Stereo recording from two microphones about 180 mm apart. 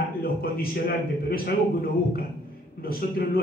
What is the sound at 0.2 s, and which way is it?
A man's voice, 55° left (ahead or behind).